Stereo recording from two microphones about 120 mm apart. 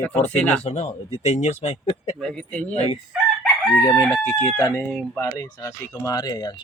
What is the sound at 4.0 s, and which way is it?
Speech, 25° left (ahead or behind).